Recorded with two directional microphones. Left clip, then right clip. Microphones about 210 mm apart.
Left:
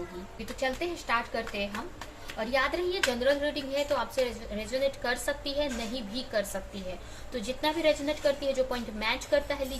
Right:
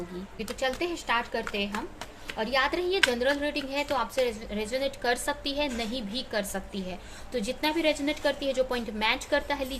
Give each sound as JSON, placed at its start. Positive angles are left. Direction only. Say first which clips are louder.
{"t": 0.6, "sound": "a woman's voice", "louder": "right 2 dB", "side_deg": -45}